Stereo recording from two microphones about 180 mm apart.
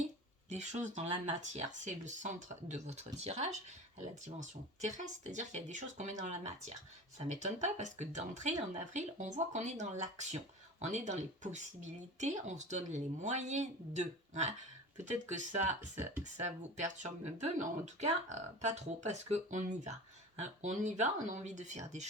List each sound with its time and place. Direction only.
0.5 s speech: 40° right (ahead or behind)
4.9 s speech: 40° right (ahead or behind)
16.7 s speech: 40° right (ahead or behind)